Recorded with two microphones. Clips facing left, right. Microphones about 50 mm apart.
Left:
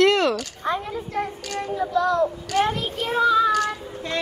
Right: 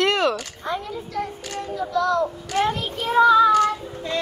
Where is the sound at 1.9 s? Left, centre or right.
Centre.